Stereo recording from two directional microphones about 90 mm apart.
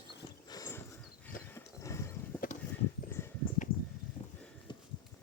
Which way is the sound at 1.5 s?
35° left (ahead or behind).